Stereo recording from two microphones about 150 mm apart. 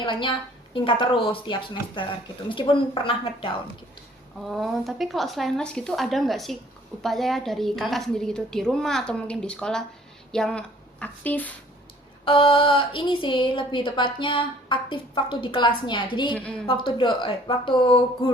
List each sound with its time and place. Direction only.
0.0 s a woman's voice: 35° left (ahead or behind)
4.4 s a woman's voice: centre (ahead or behind)
12.2 s a woman's voice: 35° left (ahead or behind)
16.3 s speech: 10° left (ahead or behind)
16.6 s a woman's voice: 35° left (ahead or behind)